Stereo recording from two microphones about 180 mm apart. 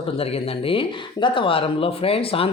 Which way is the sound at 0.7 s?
30° left (ahead or behind).